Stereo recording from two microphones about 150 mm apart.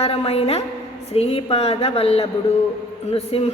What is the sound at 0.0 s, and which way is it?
A woman's voice, 40° left (ahead or behind).